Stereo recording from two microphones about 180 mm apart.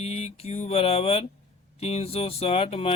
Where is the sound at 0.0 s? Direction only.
35° left (ahead or behind).